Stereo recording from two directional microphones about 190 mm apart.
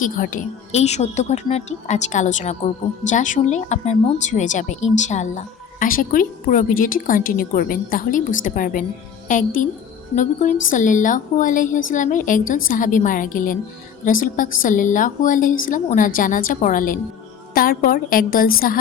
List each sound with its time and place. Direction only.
0.0 s a woman's voice: 45° left (ahead or behind)
10.7 s speech: 40° left (ahead or behind)